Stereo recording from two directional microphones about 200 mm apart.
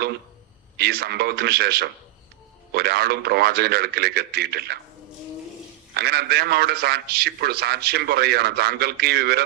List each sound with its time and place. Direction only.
0.8 s a man's voice: 50° right (ahead or behind)
5.9 s a man's voice: 55° right (ahead or behind)